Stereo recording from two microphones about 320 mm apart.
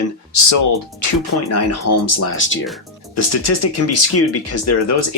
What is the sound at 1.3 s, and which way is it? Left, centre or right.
Speech, left.